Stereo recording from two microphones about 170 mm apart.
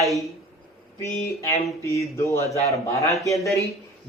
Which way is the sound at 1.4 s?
15° left (ahead or behind).